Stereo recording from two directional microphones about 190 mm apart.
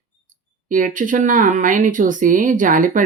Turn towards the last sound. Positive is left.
turn(degrees=-45)  # may be behind; listen again after turning